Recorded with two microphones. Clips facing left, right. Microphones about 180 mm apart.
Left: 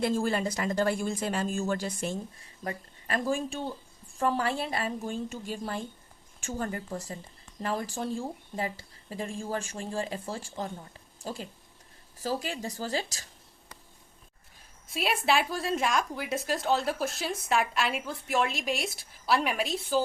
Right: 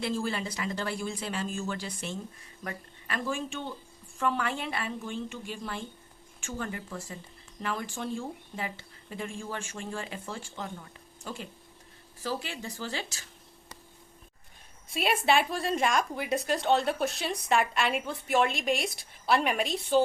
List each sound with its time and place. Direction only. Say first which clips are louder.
0.0 s speech: left 4 dB; 45° left (ahead or behind)
14.8 s a woman's voice: right 1 dB; centre (ahead or behind)